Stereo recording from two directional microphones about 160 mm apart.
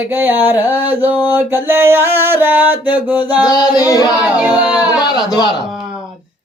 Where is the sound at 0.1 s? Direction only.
10° right (ahead or behind).